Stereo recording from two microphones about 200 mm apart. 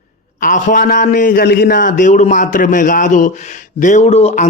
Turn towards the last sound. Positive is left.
turn(degrees=30)  # may be behind; listen again after turning